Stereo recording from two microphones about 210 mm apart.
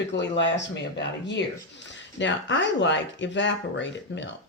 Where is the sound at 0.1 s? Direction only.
55° left (ahead or behind).